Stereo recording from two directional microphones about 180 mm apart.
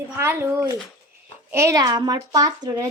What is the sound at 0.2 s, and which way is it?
A woman's voice, 10° right (ahead or behind).